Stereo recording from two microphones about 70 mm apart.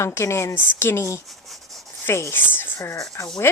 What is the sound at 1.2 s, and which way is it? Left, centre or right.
Rub, centre.